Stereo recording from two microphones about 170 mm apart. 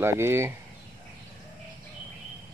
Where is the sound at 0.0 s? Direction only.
15° right (ahead or behind).